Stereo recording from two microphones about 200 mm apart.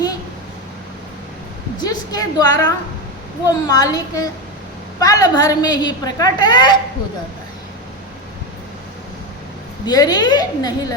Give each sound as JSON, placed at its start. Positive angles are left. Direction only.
{"t": 1.8, "sound": "a woman's voice", "side_deg": 20}
{"t": 9.8, "sound": "a woman's voice", "side_deg": 20}